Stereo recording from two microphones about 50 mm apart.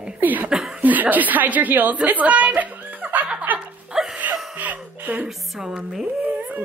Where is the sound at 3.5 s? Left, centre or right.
Right.